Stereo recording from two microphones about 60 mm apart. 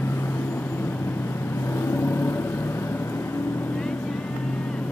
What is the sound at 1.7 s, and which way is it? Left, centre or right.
Vehicle, left.